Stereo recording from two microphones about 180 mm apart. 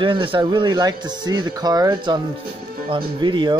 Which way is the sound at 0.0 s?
30° right (ahead or behind).